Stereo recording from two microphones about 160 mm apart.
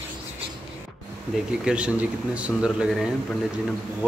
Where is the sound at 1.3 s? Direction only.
5° right (ahead or behind).